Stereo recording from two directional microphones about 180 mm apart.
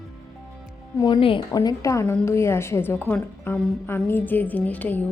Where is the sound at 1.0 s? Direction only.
20° left (ahead or behind).